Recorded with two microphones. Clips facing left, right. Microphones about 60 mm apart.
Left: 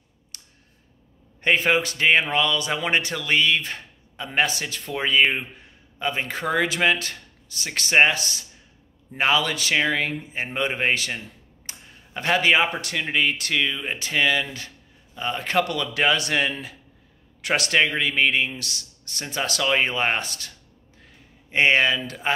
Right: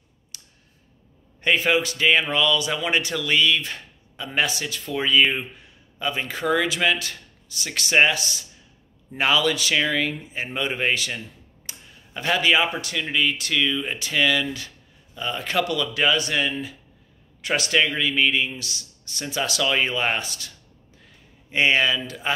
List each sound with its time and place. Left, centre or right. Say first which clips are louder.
0.3 s clicking: even; left
1.4 s speech: even; left
19.2 s speech: right 1 dB; left
21.0 s a sound: left 3 dB; left